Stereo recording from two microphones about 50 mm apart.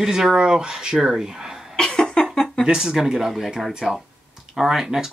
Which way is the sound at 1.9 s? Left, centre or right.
Centre.